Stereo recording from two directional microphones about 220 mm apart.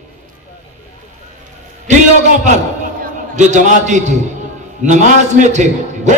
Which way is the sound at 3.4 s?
35° right (ahead or behind).